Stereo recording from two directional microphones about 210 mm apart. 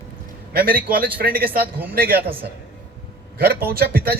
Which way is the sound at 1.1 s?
45° right (ahead or behind).